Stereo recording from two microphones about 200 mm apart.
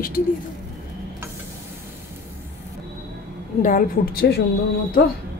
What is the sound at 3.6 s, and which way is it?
Speech, 45° left (ahead or behind).